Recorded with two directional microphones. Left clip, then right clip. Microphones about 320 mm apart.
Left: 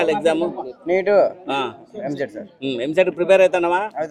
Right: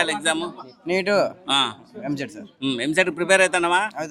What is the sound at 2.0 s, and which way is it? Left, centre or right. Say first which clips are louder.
Speech: left 4 dB; centre.